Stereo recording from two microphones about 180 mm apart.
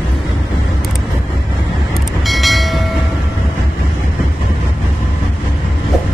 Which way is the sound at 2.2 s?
Centre (ahead or behind).